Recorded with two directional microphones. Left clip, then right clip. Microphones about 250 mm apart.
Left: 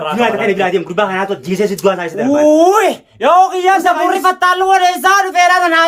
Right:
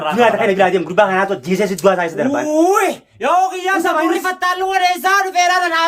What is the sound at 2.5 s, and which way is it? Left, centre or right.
Speech, centre.